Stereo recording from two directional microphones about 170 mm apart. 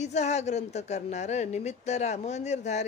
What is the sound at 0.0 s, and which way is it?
Speech, 40° left (ahead or behind).